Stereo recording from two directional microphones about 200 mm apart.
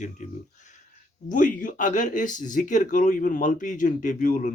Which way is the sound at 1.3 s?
40° left (ahead or behind).